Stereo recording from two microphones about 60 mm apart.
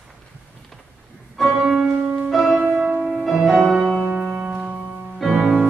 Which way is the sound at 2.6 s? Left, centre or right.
Centre.